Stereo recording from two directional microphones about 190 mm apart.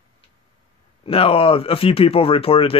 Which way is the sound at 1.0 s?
30° left (ahead or behind).